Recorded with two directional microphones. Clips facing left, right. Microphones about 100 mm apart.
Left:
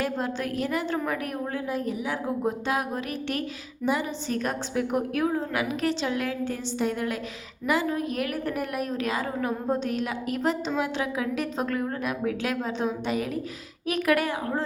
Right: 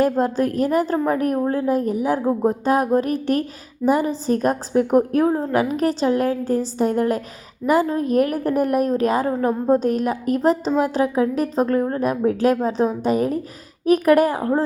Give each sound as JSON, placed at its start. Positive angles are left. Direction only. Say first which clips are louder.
{"t": 0.0, "sound": "a woman's voice", "louder": "right 10 dB", "side_deg": -40}